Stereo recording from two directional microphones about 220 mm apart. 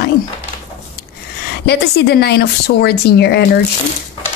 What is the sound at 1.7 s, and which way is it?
A woman's voice, 45° left (ahead or behind).